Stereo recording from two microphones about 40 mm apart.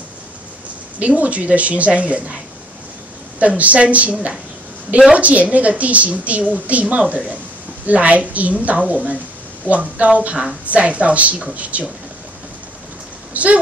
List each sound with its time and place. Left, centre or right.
0.9 s a woman's voice: right
3.3 s a woman's voice: right
13.3 s speech: right